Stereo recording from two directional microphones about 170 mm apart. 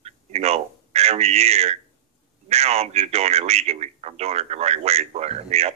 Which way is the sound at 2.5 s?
40° right (ahead or behind).